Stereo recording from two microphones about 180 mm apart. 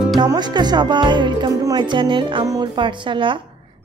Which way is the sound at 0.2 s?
25° right (ahead or behind).